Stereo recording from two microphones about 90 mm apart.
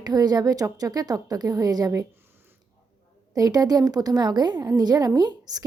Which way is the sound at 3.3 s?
45° right (ahead or behind).